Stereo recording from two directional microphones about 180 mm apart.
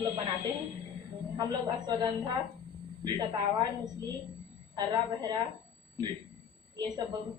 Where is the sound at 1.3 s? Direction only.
25° right (ahead or behind).